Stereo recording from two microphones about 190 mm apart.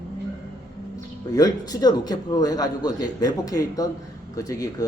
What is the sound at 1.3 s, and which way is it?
A man's voice, 20° left (ahead or behind).